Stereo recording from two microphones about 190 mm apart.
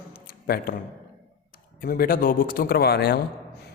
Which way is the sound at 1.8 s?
50° left (ahead or behind).